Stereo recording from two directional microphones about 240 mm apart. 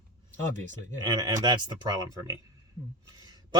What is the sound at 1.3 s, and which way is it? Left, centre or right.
Speech, centre.